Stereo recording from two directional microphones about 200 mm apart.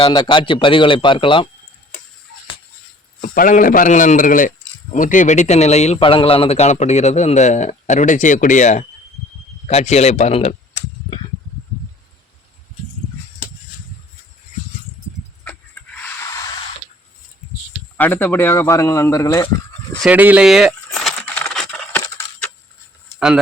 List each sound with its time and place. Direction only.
0.0 s speech: 25° left (ahead or behind)
3.2 s a man's voice: 40° left (ahead or behind)
17.9 s speech: 10° left (ahead or behind)
20.1 s a sound: 5° right (ahead or behind)